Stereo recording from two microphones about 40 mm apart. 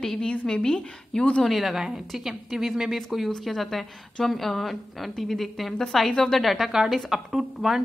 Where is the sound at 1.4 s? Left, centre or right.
Centre.